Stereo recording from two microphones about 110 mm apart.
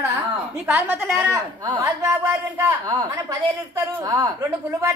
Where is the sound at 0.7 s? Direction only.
15° right (ahead or behind).